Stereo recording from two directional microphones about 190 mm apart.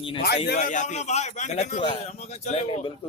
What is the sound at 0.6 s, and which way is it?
A man's voice, 40° left (ahead or behind).